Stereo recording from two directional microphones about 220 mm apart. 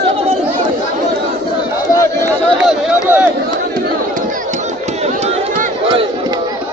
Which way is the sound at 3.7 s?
40° right (ahead or behind).